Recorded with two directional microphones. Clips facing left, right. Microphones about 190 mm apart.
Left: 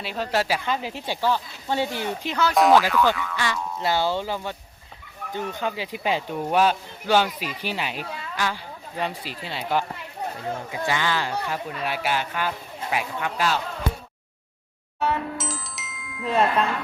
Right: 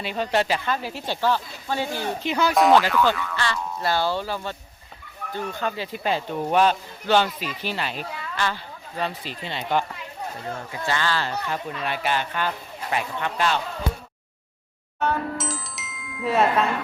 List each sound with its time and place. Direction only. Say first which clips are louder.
0.0 s speech: right 2 dB; centre (ahead or behind)
1.6 s speech: left 3 dB; 25° left (ahead or behind)
2.2 s speech: right 2 dB; 10° right (ahead or behind)
2.6 s speech: even; centre (ahead or behind)
3.3 s speech: even; 15° left (ahead or behind)
15.0 s music: right 1 dB; centre (ahead or behind)